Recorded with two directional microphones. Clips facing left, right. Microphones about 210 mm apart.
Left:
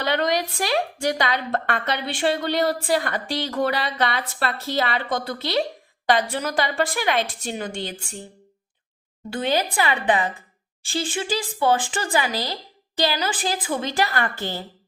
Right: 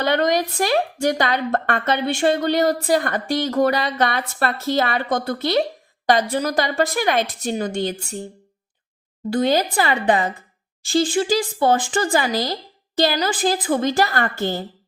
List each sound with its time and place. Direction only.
0.0 s a woman's voice: 45° right (ahead or behind)
9.3 s a woman's voice: 40° right (ahead or behind)